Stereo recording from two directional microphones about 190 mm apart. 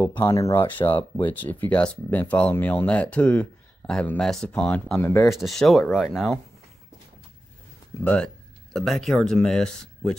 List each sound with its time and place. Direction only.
0.0 s speech: 20° left (ahead or behind)
1.3 s speech: 10° left (ahead or behind)
8.0 s speech: 5° left (ahead or behind)